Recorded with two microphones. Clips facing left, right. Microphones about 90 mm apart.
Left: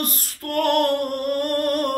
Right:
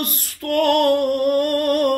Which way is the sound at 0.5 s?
40° left (ahead or behind).